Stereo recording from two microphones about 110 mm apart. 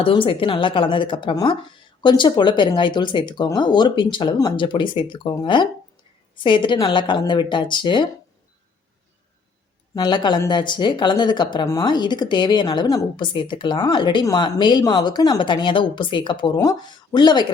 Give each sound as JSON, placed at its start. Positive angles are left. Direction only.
{"t": 0.0, "sound": "speech", "side_deg": 50}
{"t": 9.9, "sound": "speech", "side_deg": 40}
{"t": 16.6, "sound": "speech", "side_deg": 35}